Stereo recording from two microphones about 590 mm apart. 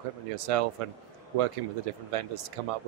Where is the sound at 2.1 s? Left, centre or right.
Right.